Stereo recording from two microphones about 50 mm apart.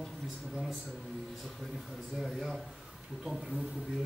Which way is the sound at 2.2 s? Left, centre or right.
Centre.